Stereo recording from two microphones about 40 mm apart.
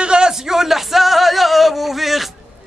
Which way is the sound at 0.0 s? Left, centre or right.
Right.